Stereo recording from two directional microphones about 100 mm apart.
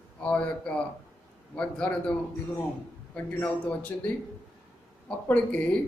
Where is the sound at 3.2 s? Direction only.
15° left (ahead or behind).